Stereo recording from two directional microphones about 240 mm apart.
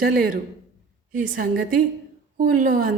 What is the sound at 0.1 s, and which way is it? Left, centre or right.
A woman's voice, right.